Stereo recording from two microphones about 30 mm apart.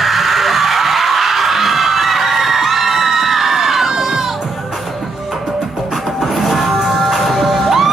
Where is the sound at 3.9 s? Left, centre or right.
Centre.